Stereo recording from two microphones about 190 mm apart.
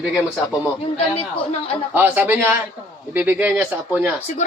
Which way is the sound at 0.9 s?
30° left (ahead or behind).